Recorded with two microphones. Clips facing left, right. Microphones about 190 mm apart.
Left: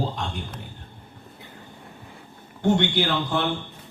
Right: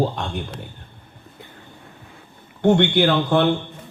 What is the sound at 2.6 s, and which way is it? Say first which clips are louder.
Speech: right 5 dB; 60° right (ahead or behind).